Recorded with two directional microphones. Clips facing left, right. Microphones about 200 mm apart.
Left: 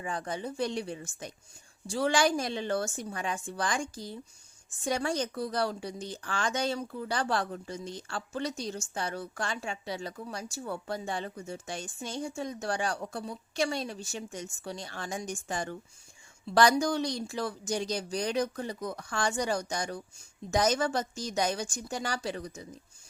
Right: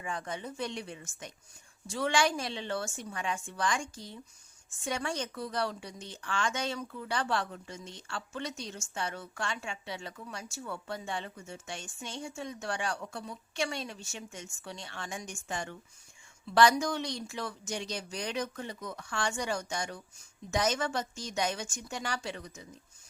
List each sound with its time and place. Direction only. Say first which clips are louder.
0.0 s speech: left 3 dB; 35° left (ahead or behind)